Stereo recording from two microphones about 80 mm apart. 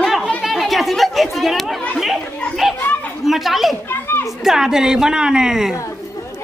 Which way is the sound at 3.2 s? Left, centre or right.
Centre.